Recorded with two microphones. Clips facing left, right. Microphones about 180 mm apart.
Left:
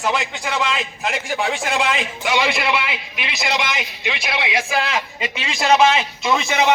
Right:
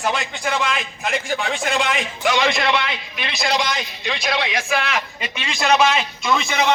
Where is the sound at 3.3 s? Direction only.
20° left (ahead or behind).